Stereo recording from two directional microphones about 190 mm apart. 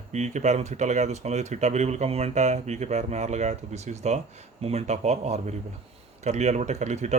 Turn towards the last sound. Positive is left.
turn(degrees=-35)  # may be behind; listen again after turning